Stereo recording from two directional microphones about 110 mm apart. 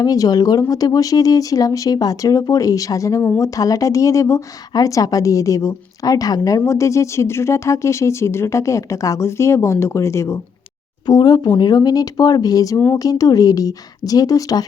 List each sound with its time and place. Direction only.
0.0 s speech: 35° left (ahead or behind)
11.0 s speech: 40° left (ahead or behind)